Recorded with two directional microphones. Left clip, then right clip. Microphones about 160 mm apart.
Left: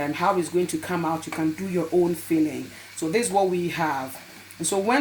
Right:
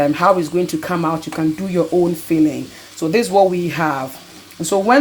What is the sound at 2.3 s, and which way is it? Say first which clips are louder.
Speech: right 8 dB; 30° right (ahead or behind).